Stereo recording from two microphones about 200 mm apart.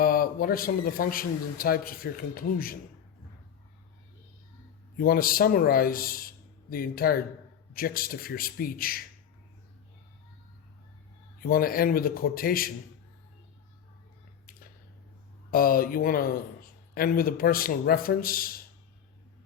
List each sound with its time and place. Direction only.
0.0 s speech: 45° left (ahead or behind)
4.9 s speech: 45° left (ahead or behind)
11.4 s speech: 45° left (ahead or behind)
15.4 s speech: 45° left (ahead or behind)